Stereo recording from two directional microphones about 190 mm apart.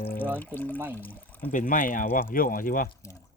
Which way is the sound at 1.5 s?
45° left (ahead or behind).